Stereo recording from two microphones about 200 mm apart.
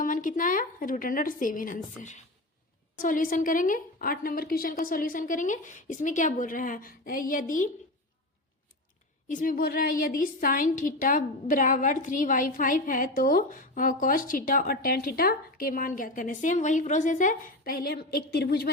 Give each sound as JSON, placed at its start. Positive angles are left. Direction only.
{"t": 0.0, "sound": "a woman's voice", "side_deg": 40}
{"t": 9.3, "sound": "a woman's voice", "side_deg": 40}